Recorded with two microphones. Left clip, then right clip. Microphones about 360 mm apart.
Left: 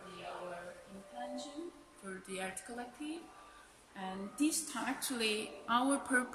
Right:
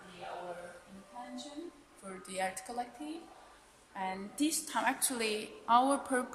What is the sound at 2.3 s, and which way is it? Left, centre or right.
Speech, centre.